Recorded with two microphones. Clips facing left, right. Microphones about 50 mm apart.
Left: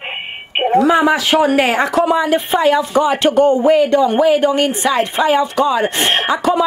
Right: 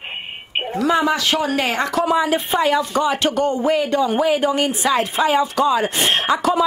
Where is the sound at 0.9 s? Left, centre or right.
Centre.